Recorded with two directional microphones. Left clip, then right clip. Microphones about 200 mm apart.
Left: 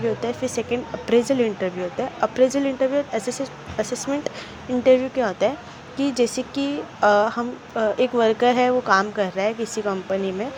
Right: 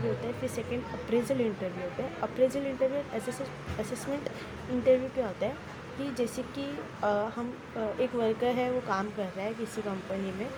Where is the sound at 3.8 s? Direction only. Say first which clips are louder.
Left 10 dB; 25° left (ahead or behind).